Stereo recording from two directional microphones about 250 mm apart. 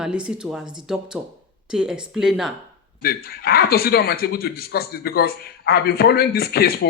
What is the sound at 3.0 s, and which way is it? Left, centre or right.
Speech, left.